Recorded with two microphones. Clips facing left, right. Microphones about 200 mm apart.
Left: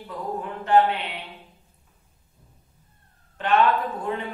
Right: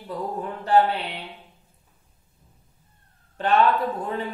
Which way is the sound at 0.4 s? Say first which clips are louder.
Even; 35° right (ahead or behind).